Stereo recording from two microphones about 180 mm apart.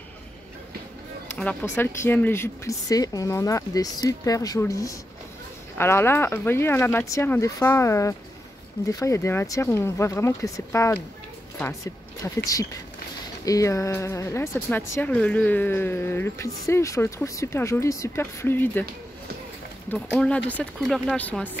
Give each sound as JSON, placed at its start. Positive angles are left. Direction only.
{"t": 1.3, "sound": "speech", "side_deg": 10}
{"t": 11.5, "sound": "a sound", "side_deg": 15}
{"t": 13.5, "sound": "speech", "side_deg": 20}
{"t": 19.9, "sound": "speech", "side_deg": 5}